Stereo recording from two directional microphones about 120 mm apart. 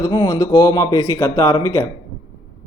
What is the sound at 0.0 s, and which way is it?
A man's voice, 35° left (ahead or behind).